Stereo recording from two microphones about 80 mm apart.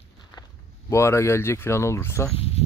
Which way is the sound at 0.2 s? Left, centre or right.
Left.